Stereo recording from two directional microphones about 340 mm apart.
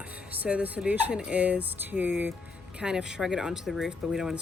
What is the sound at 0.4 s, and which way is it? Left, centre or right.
Speech, centre.